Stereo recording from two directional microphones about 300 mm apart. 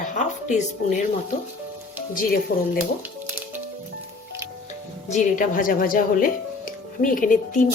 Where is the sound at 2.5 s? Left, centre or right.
Left.